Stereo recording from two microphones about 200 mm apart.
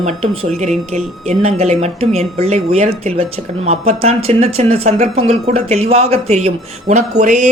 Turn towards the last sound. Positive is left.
turn(degrees=-35)  # may be behind; listen again after turning